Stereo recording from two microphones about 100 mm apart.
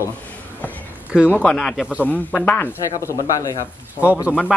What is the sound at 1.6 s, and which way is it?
Speech, centre (ahead or behind).